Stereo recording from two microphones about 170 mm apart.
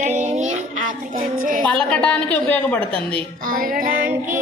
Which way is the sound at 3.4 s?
55° right (ahead or behind).